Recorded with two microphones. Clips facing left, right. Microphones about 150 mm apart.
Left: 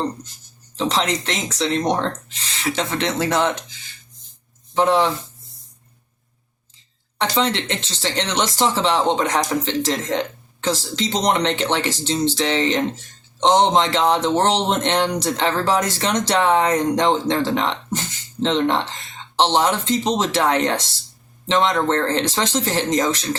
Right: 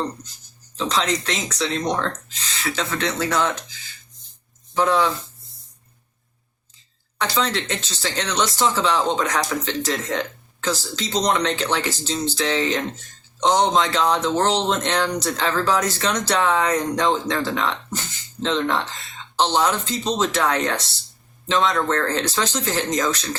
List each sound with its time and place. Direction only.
0.8 s speech: 25° left (ahead or behind)
4.7 s speech: 25° left (ahead or behind)
7.2 s speech: 25° left (ahead or behind)